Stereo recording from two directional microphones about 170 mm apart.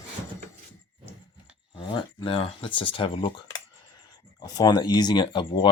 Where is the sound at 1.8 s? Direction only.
30° left (ahead or behind).